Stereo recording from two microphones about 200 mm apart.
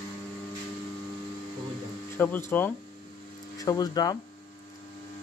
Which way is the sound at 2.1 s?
10° left (ahead or behind).